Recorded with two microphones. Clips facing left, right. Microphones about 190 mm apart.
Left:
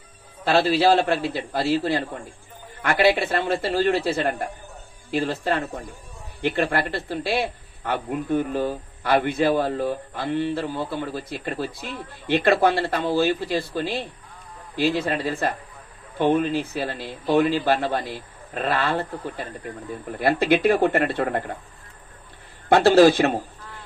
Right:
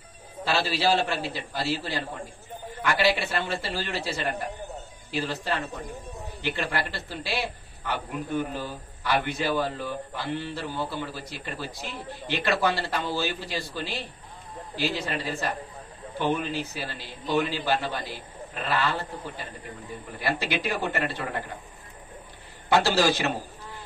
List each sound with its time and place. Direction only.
0.5 s speech: 55° left (ahead or behind)
22.7 s speech: 55° left (ahead or behind)